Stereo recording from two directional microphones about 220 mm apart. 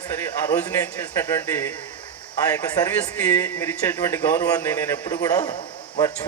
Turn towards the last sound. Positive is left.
turn(degrees=15)  # may be behind; listen again after turning